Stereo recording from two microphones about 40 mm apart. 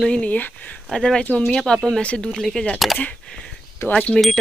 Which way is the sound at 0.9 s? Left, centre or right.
Centre.